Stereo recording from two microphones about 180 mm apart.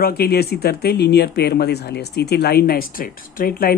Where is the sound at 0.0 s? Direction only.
60° left (ahead or behind).